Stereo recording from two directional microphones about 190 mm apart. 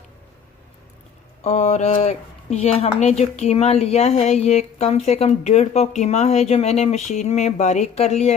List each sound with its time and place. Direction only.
1.5 s a woman's voice: 35° left (ahead or behind)